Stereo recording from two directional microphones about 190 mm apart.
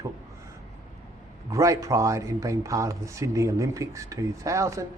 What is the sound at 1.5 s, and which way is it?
Speech, 15° right (ahead or behind).